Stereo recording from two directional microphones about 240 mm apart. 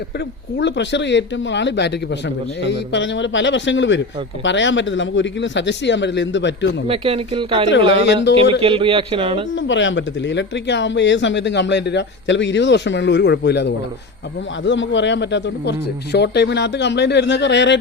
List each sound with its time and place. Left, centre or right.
0.6 s speech: left
6.8 s speech: right
7.9 s speech: left
8.6 s speech: right
9.6 s speech: left